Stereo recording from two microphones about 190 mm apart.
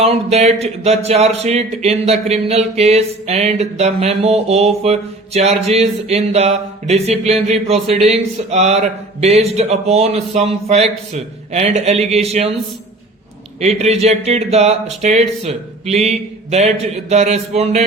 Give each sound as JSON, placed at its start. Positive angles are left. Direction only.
{"t": 0.0, "sound": "speech", "side_deg": -35}
{"t": 13.6, "sound": "speech", "side_deg": -35}